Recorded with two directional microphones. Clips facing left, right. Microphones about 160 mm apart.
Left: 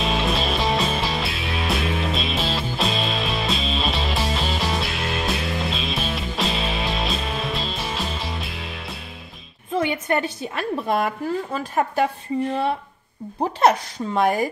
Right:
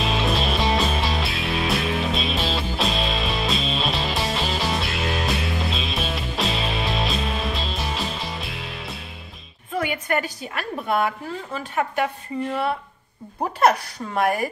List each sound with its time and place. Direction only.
0.0 s music: centre (ahead or behind)
9.8 s a woman's voice: 25° left (ahead or behind)
13.6 s a woman's voice: 25° left (ahead or behind)